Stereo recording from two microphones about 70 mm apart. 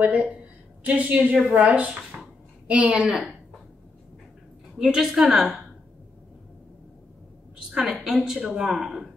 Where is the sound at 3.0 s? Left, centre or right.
Centre.